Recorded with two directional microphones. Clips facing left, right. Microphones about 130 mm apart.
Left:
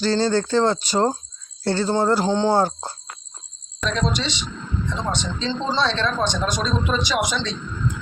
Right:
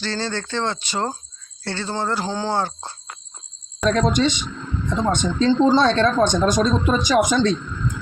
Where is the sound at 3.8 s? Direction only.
50° right (ahead or behind).